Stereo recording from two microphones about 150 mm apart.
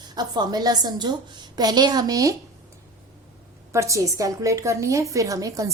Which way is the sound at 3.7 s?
20° right (ahead or behind).